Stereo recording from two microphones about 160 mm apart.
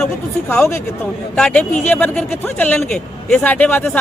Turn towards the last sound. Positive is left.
turn(degrees=10)  # may be behind; listen again after turning